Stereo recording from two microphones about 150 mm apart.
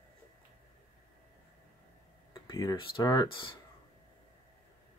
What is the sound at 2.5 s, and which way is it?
Speech, 20° left (ahead or behind).